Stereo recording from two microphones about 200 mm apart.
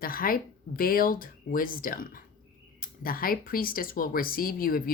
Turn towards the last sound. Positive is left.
turn(degrees=45)  # may be behind; listen again after turning